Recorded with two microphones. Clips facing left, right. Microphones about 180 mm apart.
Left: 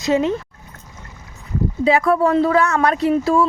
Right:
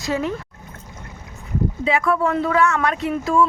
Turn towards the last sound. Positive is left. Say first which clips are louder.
# left 3 dB
turn(degrees=35)  # may be behind; listen again after turning